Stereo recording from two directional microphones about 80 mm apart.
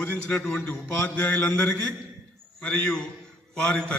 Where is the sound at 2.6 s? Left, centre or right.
Centre.